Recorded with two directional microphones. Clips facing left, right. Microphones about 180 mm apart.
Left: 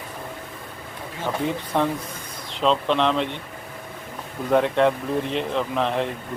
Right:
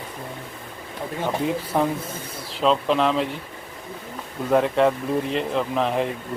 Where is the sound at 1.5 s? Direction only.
5° right (ahead or behind).